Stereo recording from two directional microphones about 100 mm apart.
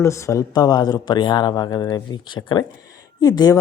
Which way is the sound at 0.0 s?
30° left (ahead or behind).